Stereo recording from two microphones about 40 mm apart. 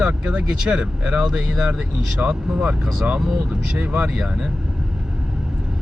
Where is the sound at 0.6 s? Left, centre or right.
Right.